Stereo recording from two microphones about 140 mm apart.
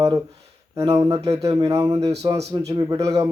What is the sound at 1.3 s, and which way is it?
A man's voice, 20° right (ahead or behind).